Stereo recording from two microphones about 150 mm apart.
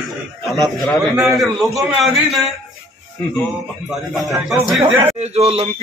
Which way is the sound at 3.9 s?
Centre (ahead or behind).